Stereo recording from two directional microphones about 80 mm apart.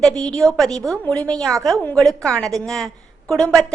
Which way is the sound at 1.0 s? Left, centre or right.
Centre.